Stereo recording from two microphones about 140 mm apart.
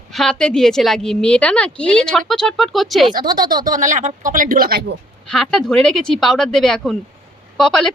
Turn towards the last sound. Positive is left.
turn(degrees=5)  # may be behind; listen again after turning